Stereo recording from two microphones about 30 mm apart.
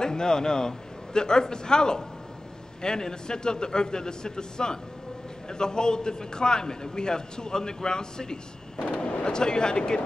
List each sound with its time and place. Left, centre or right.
0.0 s a man's voice: left